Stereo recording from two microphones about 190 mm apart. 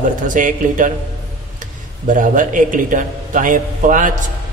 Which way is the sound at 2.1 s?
40° right (ahead or behind).